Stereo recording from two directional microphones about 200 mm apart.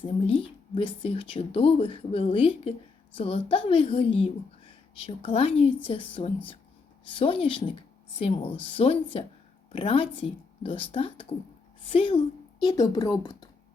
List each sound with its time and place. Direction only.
0.0 s a woman's voice: 25° left (ahead or behind)